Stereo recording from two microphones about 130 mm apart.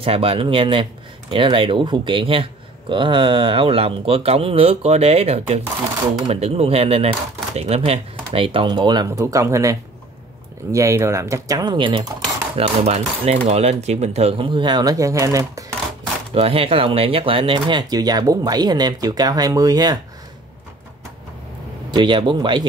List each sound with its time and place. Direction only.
0.0 s speech: 45° right (ahead or behind)
9.0 s speech: 25° right (ahead or behind)
12.5 s speech: 55° right (ahead or behind); by 15.6 s 25° right (ahead or behind)
16.3 s speech: 45° right (ahead or behind); by 20.0 s 30° right (ahead or behind)
21.9 s speech: 35° right (ahead or behind)